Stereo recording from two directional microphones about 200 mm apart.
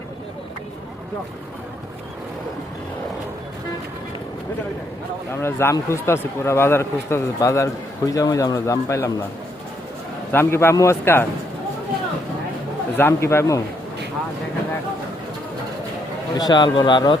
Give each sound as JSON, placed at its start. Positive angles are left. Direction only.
{"t": 5.3, "sound": "speech", "side_deg": 10}
{"t": 10.3, "sound": "speech", "side_deg": 10}
{"t": 13.0, "sound": "speech", "side_deg": 10}
{"t": 16.4, "sound": "a man's voice", "side_deg": 20}